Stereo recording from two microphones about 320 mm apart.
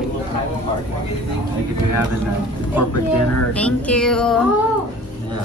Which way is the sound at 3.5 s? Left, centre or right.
Centre.